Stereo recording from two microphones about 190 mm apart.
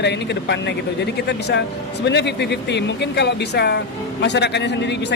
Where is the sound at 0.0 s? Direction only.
60° left (ahead or behind).